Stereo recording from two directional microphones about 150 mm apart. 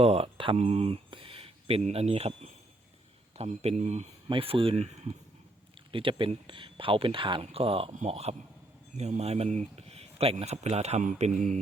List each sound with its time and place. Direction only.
0.0 s speech: 40° right (ahead or behind)
4.3 s speech: 35° right (ahead or behind)
5.9 s speech: 35° right (ahead or behind); by 11.6 s 55° right (ahead or behind)